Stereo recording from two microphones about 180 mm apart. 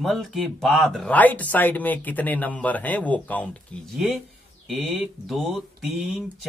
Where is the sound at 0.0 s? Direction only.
Centre (ahead or behind).